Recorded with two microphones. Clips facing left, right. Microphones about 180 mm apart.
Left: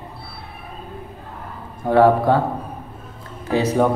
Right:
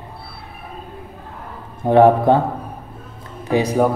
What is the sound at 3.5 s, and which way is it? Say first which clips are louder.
Speech: right 1 dB; 10° right (ahead or behind).